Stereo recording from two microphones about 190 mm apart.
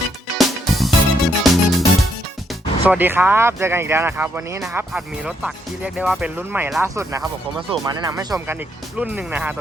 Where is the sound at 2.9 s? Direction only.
10° right (ahead or behind).